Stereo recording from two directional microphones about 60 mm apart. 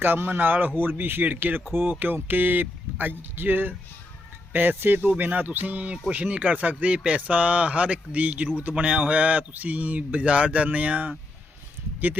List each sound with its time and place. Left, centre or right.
0.0 s speech: right